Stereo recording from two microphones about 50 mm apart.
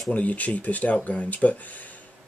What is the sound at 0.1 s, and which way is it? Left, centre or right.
Speech, left.